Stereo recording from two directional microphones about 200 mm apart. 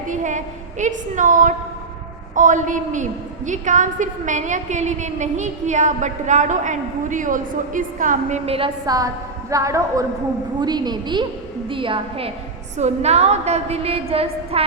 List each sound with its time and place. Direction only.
0.1 s a woman's voice: 40° right (ahead or behind)